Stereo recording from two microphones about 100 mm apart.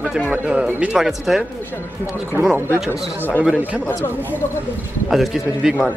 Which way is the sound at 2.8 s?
20° right (ahead or behind).